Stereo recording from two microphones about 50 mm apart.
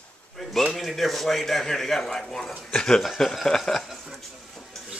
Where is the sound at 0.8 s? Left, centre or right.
Centre.